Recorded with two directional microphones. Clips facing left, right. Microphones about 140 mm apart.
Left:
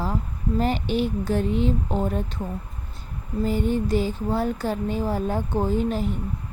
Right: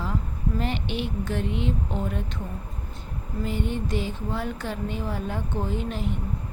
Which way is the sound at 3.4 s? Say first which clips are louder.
Left 6 dB; 40° left (ahead or behind).